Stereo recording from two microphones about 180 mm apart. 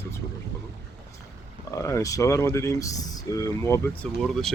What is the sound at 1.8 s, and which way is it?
Speech, 15° left (ahead or behind).